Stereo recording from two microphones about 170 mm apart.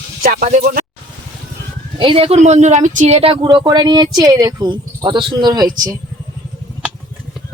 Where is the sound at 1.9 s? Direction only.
30° right (ahead or behind).